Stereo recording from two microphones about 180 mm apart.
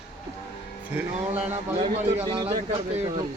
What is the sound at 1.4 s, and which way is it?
A man's voice, 35° right (ahead or behind).